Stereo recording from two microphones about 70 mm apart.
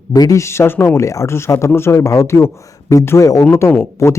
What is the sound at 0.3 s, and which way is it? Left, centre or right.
Speech, left.